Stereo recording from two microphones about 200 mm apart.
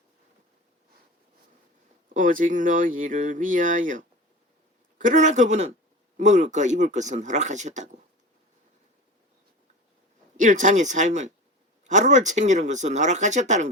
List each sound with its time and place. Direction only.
2.1 s speech: 40° right (ahead or behind)
10.3 s speech: 40° right (ahead or behind)